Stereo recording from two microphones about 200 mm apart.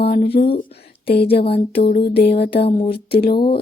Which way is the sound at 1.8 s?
50° left (ahead or behind).